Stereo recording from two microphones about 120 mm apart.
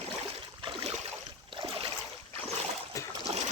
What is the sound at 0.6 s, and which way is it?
Boat, 50° right (ahead or behind).